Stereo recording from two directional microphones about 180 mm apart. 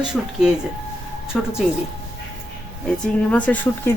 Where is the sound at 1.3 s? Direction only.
Centre (ahead or behind).